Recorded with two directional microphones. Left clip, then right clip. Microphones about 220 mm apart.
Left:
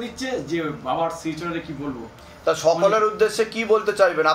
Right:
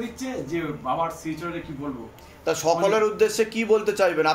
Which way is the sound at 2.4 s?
30° right (ahead or behind).